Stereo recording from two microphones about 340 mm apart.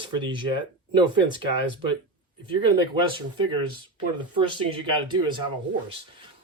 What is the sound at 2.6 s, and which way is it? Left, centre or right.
Speech, centre.